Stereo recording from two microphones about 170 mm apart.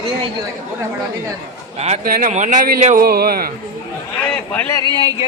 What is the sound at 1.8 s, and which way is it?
Speech, 40° right (ahead or behind).